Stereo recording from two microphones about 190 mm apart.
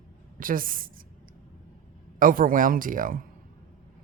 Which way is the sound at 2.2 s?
45° right (ahead or behind).